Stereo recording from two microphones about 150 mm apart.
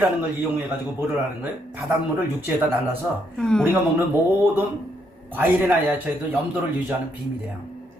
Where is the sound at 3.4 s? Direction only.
5° left (ahead or behind).